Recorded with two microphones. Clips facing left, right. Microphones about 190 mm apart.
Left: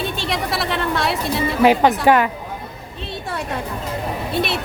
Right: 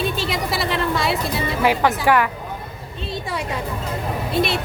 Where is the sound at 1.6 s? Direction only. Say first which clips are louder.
Left 5 dB; 20° left (ahead or behind).